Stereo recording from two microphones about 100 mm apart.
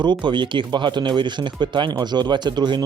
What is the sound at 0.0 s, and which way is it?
Speech, 50° right (ahead or behind).